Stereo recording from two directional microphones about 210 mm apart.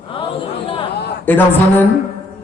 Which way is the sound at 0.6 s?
25° left (ahead or behind).